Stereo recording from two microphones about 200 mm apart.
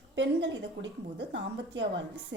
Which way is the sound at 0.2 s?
60° right (ahead or behind).